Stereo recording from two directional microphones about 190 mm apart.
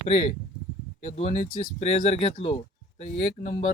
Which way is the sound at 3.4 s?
50° left (ahead or behind).